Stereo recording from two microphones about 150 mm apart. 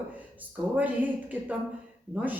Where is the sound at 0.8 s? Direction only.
10° right (ahead or behind).